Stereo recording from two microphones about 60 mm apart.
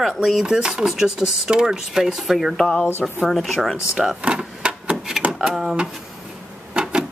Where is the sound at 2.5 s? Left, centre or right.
Centre.